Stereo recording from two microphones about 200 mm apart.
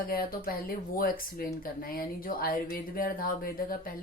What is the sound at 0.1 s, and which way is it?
Speech, 45° left (ahead or behind).